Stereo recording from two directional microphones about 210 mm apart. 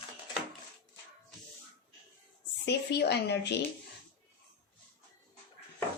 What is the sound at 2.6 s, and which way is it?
Speech, 50° left (ahead or behind).